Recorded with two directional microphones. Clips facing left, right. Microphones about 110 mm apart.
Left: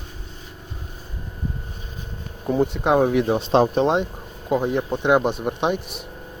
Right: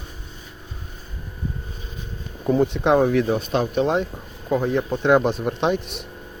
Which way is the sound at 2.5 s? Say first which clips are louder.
Right 1 dB; 5° left (ahead or behind).